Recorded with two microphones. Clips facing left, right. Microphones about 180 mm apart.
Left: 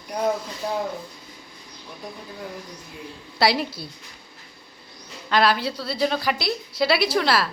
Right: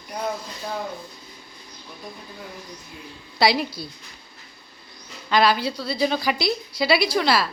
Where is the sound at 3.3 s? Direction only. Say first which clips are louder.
Right 1 dB; centre (ahead or behind).